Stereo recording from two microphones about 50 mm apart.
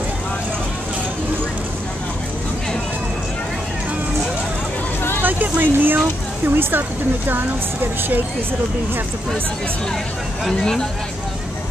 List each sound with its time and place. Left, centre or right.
5.2 s a sound: right
6.4 s speech: right
10.6 s speech: centre